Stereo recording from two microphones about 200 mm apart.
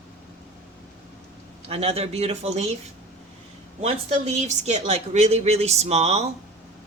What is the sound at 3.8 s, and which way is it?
A woman's voice, 30° right (ahead or behind).